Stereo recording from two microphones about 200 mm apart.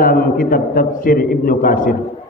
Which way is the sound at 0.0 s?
45° left (ahead or behind).